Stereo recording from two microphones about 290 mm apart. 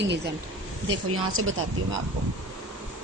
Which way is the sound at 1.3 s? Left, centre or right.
Right.